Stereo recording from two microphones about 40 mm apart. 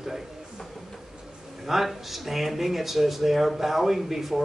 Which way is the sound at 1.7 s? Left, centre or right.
Centre.